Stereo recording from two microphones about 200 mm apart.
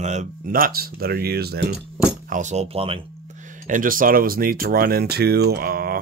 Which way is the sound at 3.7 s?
45° right (ahead or behind).